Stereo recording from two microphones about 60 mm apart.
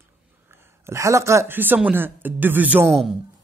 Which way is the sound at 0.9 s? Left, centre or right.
Right.